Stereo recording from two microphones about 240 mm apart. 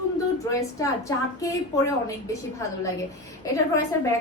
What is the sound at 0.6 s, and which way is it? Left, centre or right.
A woman's voice, centre.